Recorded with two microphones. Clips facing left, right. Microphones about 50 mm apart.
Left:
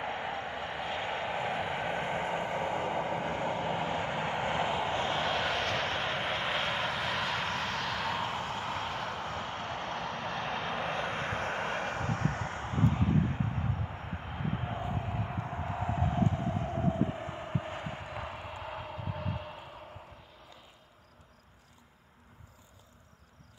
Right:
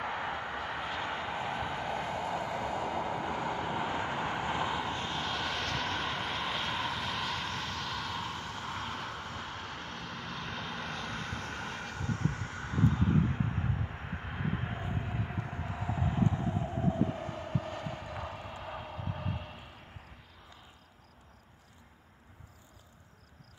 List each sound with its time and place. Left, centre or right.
0.2 s vehicle: centre
0.6 s vehicle: centre
0.8 s vehicle: left
9.4 s vehicle: left
9.8 s vehicle: left
13.5 s vehicle: centre
15.4 s vehicle: left
15.8 s vehicle: left
16.5 s vehicle: left
16.9 s vehicle: left; by 19.6 s centre